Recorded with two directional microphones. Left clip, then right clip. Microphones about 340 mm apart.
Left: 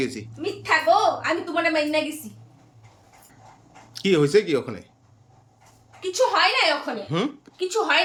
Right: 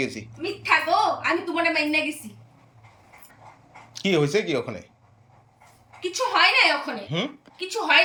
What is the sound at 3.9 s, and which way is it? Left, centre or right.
Speech, centre.